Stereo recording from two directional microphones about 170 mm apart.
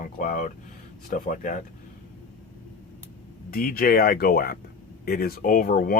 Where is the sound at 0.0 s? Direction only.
50° left (ahead or behind).